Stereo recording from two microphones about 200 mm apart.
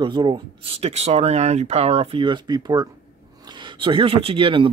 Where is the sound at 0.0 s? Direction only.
25° right (ahead or behind).